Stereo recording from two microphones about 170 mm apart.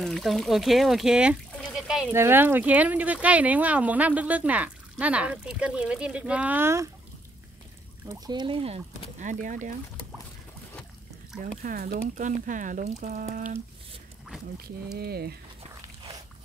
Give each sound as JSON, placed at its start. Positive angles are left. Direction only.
{"t": 0.0, "sound": "speech", "side_deg": 0}
{"t": 1.6, "sound": "a sound", "side_deg": 0}
{"t": 2.1, "sound": "speech", "side_deg": -15}
{"t": 8.1, "sound": "speech", "side_deg": -25}
{"t": 9.2, "sound": "speech", "side_deg": -50}
{"t": 11.6, "sound": "speech", "side_deg": -60}
{"t": 15.0, "sound": "speech", "side_deg": -70}